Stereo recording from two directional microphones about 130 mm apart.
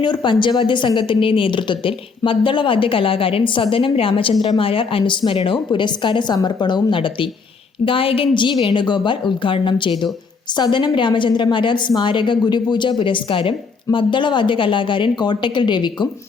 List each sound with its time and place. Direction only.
0.0 s a woman's voice: 35° left (ahead or behind)